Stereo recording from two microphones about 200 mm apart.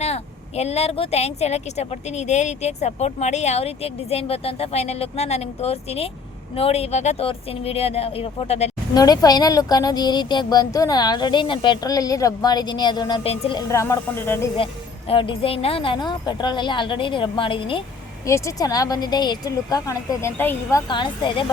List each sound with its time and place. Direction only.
0.0 s speech: 30° left (ahead or behind)
9.0 s speech: 20° left (ahead or behind)
13.6 s speech: 15° left (ahead or behind)
14.5 s speech: 25° left (ahead or behind)
18.3 s speech: 15° left (ahead or behind)